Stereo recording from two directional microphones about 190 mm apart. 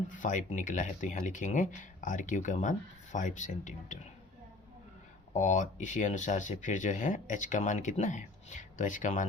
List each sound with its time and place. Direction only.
0.1 s speech: 40° left (ahead or behind)
5.3 s speech: 40° left (ahead or behind)